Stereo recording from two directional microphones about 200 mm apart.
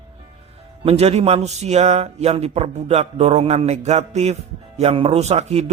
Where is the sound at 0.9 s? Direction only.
30° right (ahead or behind).